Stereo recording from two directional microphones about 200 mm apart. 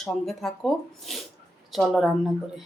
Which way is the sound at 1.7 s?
Centre (ahead or behind).